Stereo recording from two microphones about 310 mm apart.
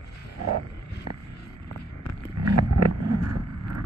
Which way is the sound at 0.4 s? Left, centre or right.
Right.